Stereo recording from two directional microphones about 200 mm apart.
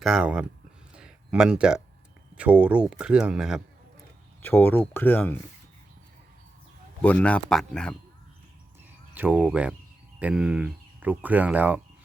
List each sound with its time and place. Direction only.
0.0 s speech: 5° right (ahead or behind)
0.9 s a sound: 5° right (ahead or behind)
2.3 s speech: 5° right (ahead or behind)
4.4 s speech: 10° left (ahead or behind)
7.0 s speech: 5° left (ahead or behind)
9.1 s speech: 10° right (ahead or behind)